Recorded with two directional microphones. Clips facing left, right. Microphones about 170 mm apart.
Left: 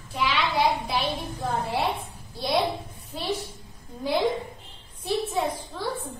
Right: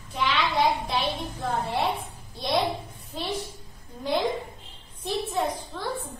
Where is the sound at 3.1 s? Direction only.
5° left (ahead or behind).